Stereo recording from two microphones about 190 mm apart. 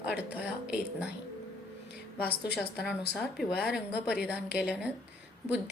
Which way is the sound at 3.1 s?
Centre (ahead or behind).